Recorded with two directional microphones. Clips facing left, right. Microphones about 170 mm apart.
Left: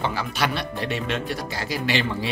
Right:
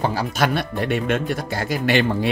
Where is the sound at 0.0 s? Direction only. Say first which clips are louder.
Right 4 dB; 40° right (ahead or behind).